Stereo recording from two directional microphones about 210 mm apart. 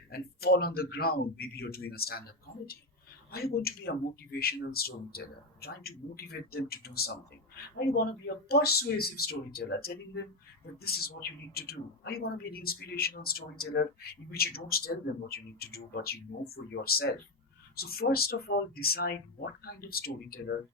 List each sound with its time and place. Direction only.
0.1 s speech: 45° left (ahead or behind)
8.4 s speech: 50° left (ahead or behind)